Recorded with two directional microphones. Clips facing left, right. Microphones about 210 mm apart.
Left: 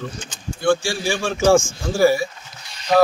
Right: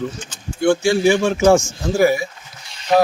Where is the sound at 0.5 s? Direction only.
20° right (ahead or behind).